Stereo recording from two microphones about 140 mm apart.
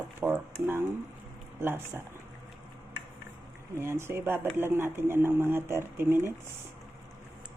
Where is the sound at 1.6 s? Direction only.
15° right (ahead or behind).